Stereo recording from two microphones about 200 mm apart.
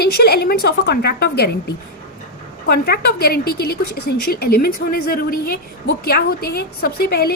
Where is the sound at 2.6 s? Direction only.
50° left (ahead or behind).